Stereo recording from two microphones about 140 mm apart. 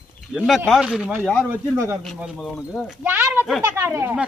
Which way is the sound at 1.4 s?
15° right (ahead or behind).